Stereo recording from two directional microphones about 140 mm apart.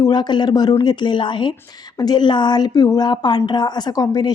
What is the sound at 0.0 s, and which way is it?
A woman's voice, 30° left (ahead or behind).